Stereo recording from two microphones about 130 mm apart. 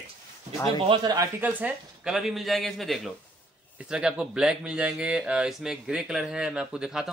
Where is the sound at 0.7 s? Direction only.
40° right (ahead or behind).